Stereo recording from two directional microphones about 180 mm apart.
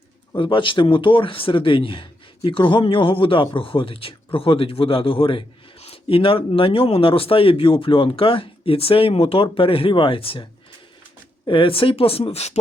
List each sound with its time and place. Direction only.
0.3 s a man's voice: 25° left (ahead or behind)
11.4 s speech: 30° left (ahead or behind)